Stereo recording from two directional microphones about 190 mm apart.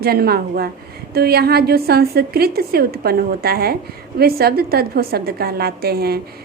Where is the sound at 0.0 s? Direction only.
55° right (ahead or behind).